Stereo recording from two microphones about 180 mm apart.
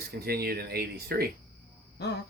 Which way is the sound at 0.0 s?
60° right (ahead or behind).